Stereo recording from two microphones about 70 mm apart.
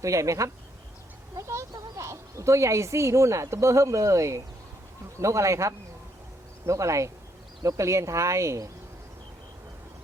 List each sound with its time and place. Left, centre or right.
0.0 s speech: right
1.4 s a sound: right
2.0 s speech: right